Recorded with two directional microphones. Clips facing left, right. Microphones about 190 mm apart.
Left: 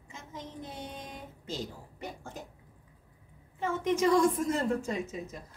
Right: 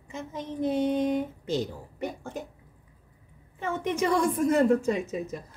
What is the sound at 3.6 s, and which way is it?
Speech, 65° right (ahead or behind).